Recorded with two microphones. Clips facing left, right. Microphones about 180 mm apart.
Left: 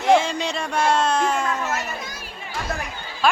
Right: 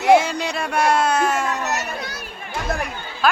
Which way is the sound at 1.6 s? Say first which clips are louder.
Right 2 dB; 70° right (ahead or behind).